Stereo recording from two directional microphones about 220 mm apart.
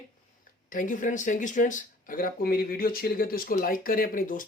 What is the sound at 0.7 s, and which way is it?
Speech, 35° left (ahead or behind).